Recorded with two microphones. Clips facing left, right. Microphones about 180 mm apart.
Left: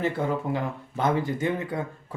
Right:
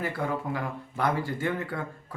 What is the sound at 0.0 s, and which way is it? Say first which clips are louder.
Speech: left 4 dB; 20° left (ahead or behind).